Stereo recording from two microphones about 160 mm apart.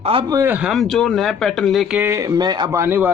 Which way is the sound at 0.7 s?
Centre (ahead or behind).